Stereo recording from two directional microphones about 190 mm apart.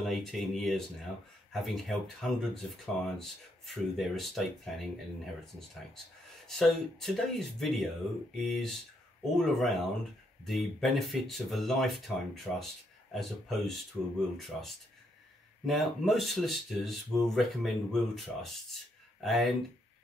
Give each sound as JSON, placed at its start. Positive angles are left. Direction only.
{"t": 0.0, "sound": "speech", "side_deg": 0}
{"t": 6.4, "sound": "speech", "side_deg": 0}